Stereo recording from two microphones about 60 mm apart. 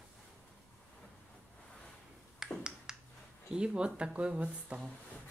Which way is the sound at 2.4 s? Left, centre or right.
Centre.